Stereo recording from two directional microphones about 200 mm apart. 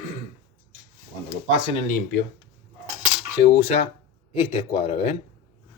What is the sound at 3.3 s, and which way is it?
Speech, 30° left (ahead or behind).